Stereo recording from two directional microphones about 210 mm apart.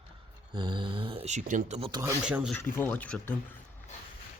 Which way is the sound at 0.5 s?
20° right (ahead or behind).